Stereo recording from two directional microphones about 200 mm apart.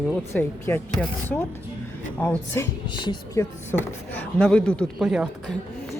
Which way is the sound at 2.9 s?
20° left (ahead or behind).